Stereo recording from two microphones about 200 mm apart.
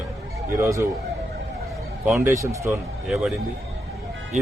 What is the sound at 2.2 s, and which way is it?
Speech, 15° right (ahead or behind).